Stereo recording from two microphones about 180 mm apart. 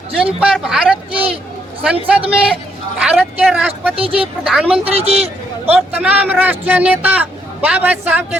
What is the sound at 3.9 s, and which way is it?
Speech, 30° right (ahead or behind).